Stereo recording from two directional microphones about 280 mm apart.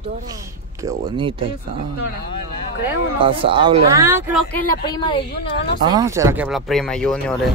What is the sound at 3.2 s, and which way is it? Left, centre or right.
Speech, centre.